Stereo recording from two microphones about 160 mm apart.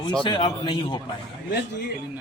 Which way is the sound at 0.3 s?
30° left (ahead or behind).